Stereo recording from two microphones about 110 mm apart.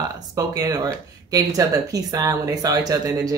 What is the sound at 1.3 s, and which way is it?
A woman's voice, 35° right (ahead or behind).